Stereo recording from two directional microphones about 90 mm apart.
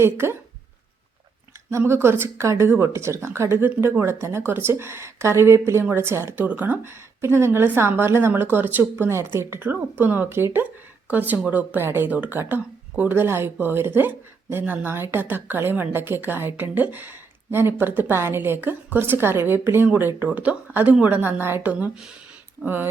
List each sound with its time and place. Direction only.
0.0 s a woman's voice: 30° right (ahead or behind)
1.8 s a woman's voice: 25° right (ahead or behind)